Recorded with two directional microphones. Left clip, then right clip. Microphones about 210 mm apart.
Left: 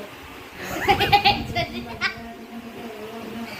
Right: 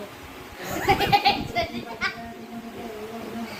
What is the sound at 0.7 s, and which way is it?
Laughter, 5° left (ahead or behind).